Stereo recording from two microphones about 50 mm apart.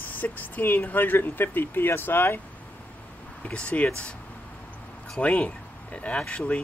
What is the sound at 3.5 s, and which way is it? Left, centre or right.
Speech, left.